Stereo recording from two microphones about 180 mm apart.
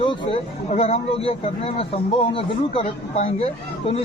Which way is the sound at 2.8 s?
35° left (ahead or behind).